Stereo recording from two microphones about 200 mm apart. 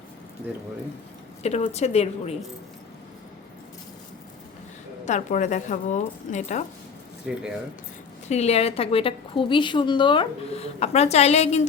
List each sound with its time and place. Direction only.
1.4 s speech: 30° left (ahead or behind)
5.0 s speech: 35° left (ahead or behind)
8.3 s a woman's voice: 35° left (ahead or behind)